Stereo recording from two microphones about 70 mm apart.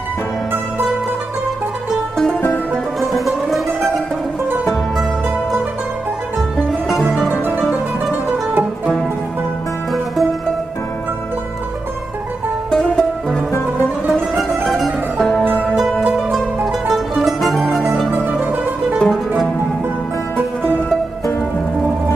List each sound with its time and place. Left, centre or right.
2.7 s music: centre
7.2 s music: right
12.7 s music: centre
13.5 s music: left
14.3 s music: centre
15.1 s music: centre
16.0 s music: centre
18.1 s music: right
18.9 s music: centre